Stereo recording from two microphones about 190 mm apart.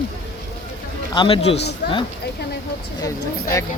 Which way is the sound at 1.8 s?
60° left (ahead or behind).